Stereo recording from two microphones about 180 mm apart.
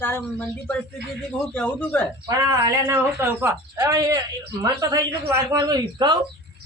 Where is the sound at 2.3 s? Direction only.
20° right (ahead or behind).